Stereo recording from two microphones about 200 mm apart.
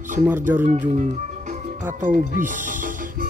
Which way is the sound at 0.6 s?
40° right (ahead or behind).